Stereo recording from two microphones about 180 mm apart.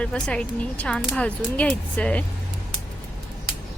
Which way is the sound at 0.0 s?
5° left (ahead or behind).